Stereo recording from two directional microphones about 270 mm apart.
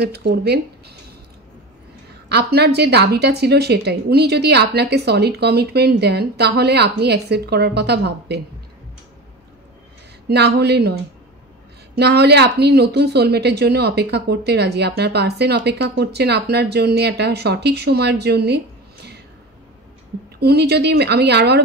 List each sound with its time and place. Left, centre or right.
0.0 s a woman's voice: right
2.2 s a woman's voice: right
10.2 s a woman's voice: right
12.0 s a woman's voice: right
20.3 s a woman's voice: right